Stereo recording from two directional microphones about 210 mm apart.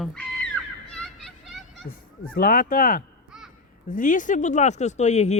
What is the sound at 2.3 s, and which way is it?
Speech, 40° left (ahead or behind).